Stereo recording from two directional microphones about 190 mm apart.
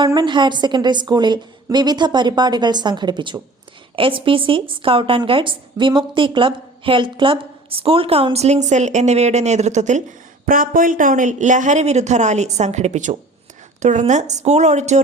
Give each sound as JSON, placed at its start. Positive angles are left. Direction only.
{"t": 0.0, "sound": "a woman's voice", "side_deg": -25}